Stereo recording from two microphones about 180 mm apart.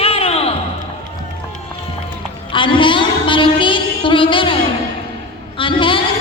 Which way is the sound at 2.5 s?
30° left (ahead or behind).